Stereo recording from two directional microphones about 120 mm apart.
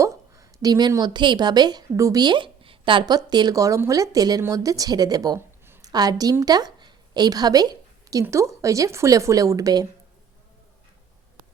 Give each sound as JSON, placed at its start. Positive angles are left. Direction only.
{"t": 0.0, "sound": "a woman's voice", "side_deg": -25}
{"t": 5.4, "sound": "a sound", "side_deg": -20}
{"t": 5.8, "sound": "a woman's voice", "side_deg": -35}